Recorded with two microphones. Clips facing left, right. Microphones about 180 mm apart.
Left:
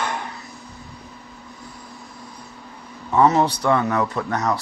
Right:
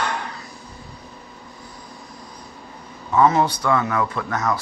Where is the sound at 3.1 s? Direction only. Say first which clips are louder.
Even; 30° left (ahead or behind).